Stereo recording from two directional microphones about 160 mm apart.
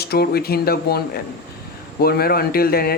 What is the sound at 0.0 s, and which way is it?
Speech, 75° left (ahead or behind).